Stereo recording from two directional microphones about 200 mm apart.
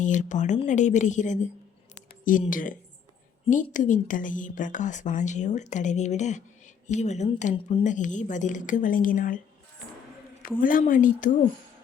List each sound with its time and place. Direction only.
0.0 s a woman's voice: 40° left (ahead or behind)
10.6 s a woman's voice: 45° left (ahead or behind)